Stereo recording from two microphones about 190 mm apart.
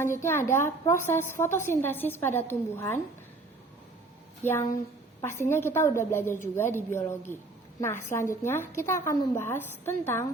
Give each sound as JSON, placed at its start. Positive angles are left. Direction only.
{"t": 0.0, "sound": "a woman's voice", "side_deg": 15}
{"t": 4.4, "sound": "a woman's voice", "side_deg": 15}